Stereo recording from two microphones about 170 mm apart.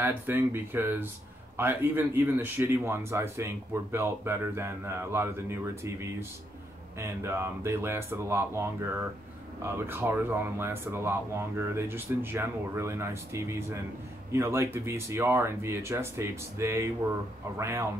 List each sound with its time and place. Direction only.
0.0 s speech: 10° right (ahead or behind)